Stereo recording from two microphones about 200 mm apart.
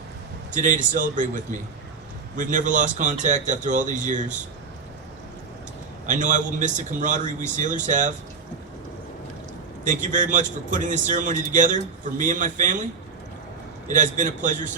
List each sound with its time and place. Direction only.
0.5 s speech: 40° right (ahead or behind)
2.3 s speech: 40° right (ahead or behind)
6.1 s speech: 40° right (ahead or behind)
9.8 s speech: 40° right (ahead or behind)
13.8 s speech: 40° right (ahead or behind)